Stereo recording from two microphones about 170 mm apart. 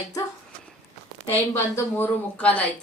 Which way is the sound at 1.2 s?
10° left (ahead or behind).